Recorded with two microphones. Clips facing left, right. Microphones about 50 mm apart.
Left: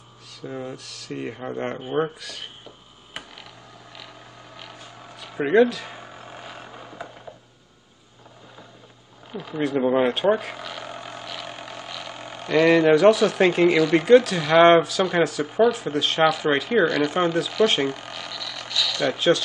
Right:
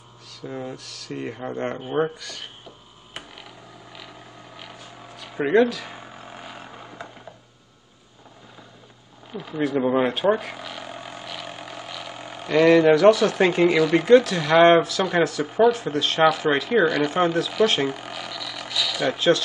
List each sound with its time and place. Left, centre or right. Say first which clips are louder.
0.4 s speech: even; centre
4.6 s a sound: even; centre
9.3 s speech: even; centre